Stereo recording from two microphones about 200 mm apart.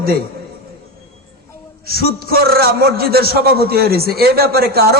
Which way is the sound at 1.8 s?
50° right (ahead or behind).